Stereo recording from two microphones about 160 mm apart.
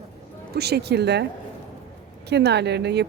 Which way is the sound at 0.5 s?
90° right.